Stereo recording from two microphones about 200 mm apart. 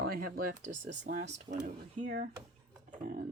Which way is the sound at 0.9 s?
55° right (ahead or behind).